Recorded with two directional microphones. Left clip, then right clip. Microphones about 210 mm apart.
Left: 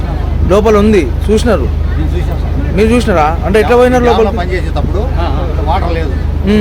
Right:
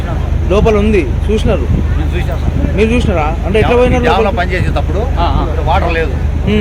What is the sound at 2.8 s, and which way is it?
Speech, 15° left (ahead or behind).